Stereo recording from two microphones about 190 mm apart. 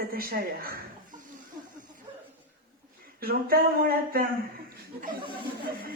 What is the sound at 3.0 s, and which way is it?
Speech, 50° right (ahead or behind).